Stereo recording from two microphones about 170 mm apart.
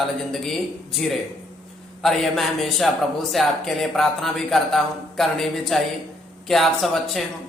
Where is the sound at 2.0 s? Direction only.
Centre (ahead or behind).